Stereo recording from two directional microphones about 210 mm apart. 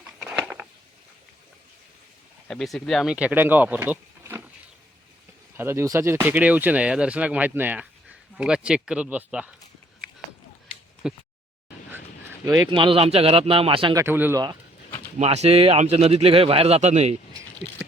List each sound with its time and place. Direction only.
0.2 s a sound: centre (ahead or behind)
2.5 s speech: centre (ahead or behind)
5.5 s speech: 10° right (ahead or behind)
11.0 s speech: 5° right (ahead or behind)
12.7 s speech: 25° right (ahead or behind)
14.0 s speech: 10° right (ahead or behind)
15.2 s speech: 30° right (ahead or behind)